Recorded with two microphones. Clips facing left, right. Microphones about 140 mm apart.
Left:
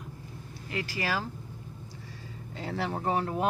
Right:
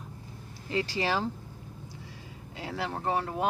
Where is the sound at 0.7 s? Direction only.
25° right (ahead or behind).